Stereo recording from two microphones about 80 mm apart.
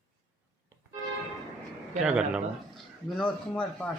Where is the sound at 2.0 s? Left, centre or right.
Centre.